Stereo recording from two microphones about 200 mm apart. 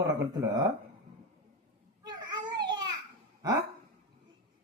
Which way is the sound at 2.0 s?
20° right (ahead or behind).